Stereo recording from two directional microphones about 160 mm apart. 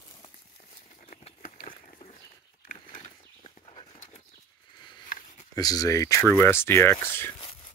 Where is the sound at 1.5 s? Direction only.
35° left (ahead or behind).